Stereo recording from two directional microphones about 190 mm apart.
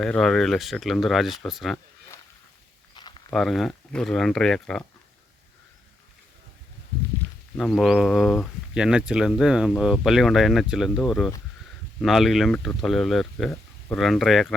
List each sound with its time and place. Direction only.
0.0 s speech: centre (ahead or behind)
2.9 s walk: 25° left (ahead or behind)
3.3 s speech: centre (ahead or behind)
7.5 s speech: centre (ahead or behind)
13.5 s a sound: 10° left (ahead or behind)
14.0 s speech: centre (ahead or behind)